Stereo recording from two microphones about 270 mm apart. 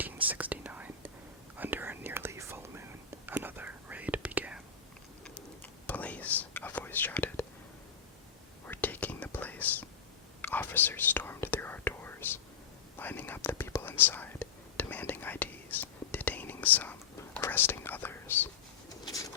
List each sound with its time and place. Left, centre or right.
0.0 s whispering: centre
5.2 s whispering: centre
8.6 s whispering: centre
19.0 s bird: centre